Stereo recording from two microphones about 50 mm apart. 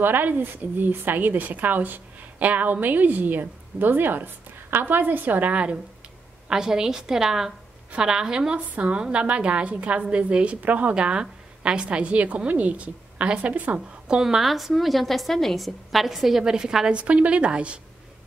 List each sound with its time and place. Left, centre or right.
0.0 s speech: right
6.5 s a woman's voice: centre
13.5 s speech: right
13.7 s a woman's voice: centre
16.4 s a woman's voice: centre
17.0 s a woman's voice: right